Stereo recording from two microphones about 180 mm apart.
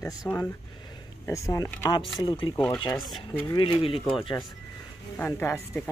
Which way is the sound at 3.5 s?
25° left (ahead or behind).